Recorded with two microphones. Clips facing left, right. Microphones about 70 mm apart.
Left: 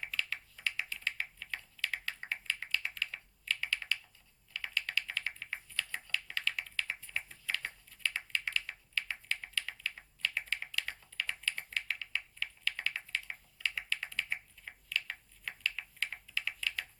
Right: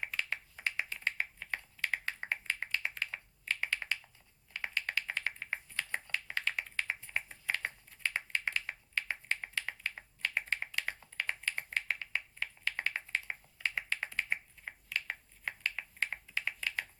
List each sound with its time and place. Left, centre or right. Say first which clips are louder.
0.0 s computer keyboard: right 1 dB; right